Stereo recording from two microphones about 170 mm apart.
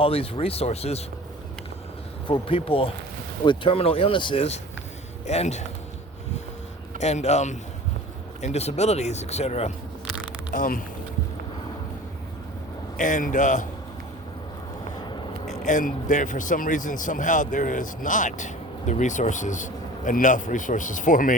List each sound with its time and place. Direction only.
0.0 s speech: 35° left (ahead or behind)
2.2 s speech: 30° left (ahead or behind)
7.0 s speech: 40° left (ahead or behind)
10.5 s speech: 55° left (ahead or behind)
13.0 s speech: 50° left (ahead or behind)
15.6 s speech: 50° left (ahead or behind)